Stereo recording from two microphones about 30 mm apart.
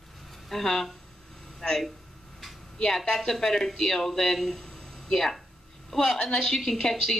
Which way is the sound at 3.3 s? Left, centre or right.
Centre.